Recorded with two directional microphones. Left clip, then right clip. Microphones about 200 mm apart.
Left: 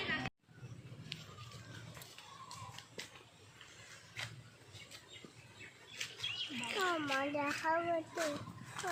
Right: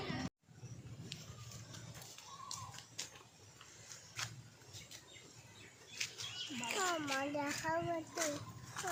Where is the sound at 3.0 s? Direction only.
10° right (ahead or behind).